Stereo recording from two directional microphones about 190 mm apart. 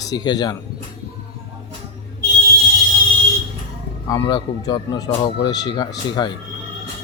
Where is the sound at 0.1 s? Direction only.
20° left (ahead or behind).